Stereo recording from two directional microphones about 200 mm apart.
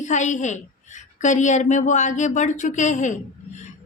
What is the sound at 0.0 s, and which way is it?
A woman's voice, 35° left (ahead or behind).